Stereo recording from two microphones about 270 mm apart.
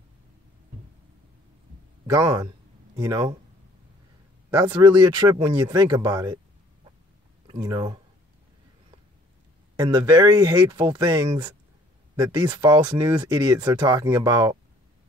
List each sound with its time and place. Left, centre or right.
2.0 s speech: centre
4.5 s speech: centre
7.4 s speech: centre
9.8 s speech: centre